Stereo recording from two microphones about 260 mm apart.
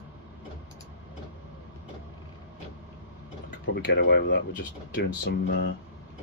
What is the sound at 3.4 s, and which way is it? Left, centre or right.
Speech, left.